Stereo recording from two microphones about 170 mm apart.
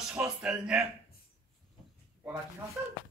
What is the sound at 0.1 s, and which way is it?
Speech, 5° right (ahead or behind).